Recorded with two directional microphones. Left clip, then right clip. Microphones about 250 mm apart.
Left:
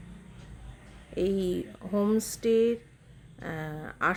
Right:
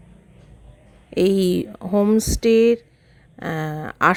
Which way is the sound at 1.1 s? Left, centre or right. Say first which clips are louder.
Right 11 dB; right.